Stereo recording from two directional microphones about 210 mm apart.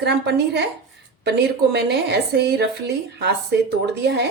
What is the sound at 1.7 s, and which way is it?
A woman's voice, 50° right (ahead or behind).